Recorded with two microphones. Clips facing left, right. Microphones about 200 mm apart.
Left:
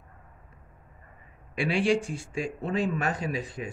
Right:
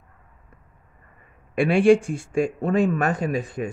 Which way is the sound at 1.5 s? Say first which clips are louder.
Right 9 dB; 55° right (ahead or behind).